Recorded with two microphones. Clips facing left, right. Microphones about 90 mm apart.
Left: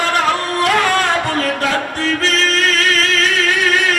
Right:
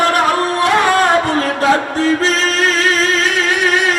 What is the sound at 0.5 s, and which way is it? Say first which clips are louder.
Music: right 2 dB; 25° right (ahead or behind).